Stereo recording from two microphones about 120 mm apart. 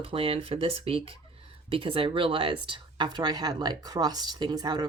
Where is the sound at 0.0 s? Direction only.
50° right (ahead or behind).